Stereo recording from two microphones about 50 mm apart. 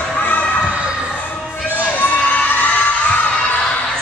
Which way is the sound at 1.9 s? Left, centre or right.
Left.